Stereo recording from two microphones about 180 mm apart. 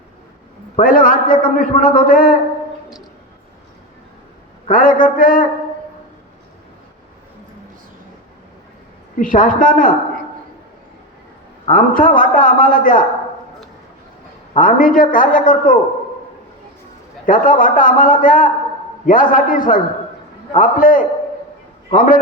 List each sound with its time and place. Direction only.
0.8 s a man's voice: 50° left (ahead or behind)
4.7 s a man's voice: 50° left (ahead or behind)
9.1 s a man's voice: 50° left (ahead or behind)
11.6 s a man's voice: 50° left (ahead or behind)
14.6 s a man's voice: 50° left (ahead or behind)
17.2 s a man's voice: 50° left (ahead or behind)